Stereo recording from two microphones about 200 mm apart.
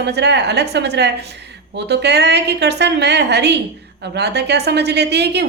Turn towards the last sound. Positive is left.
turn(degrees=-55)  # may be behind; listen again after turning